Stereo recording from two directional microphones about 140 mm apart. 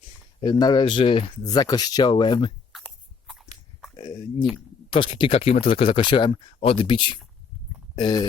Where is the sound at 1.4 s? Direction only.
25° left (ahead or behind).